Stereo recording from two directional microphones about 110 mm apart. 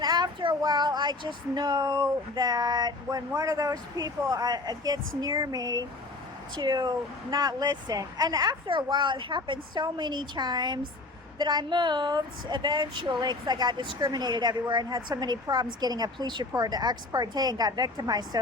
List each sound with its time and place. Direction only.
0.0 s speech: 40° right (ahead or behind)
8.6 s a woman's voice: 45° right (ahead or behind)